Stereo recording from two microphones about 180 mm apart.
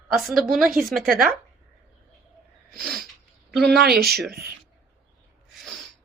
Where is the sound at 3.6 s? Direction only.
60° right (ahead or behind).